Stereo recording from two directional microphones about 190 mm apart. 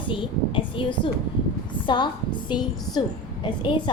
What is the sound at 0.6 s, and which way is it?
A woman's voice, 25° left (ahead or behind).